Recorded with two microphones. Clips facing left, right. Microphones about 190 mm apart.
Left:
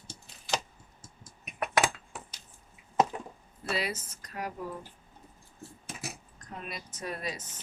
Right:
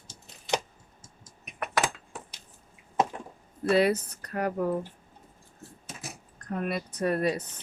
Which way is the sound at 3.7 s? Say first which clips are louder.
Right 11 dB; 60° right (ahead or behind).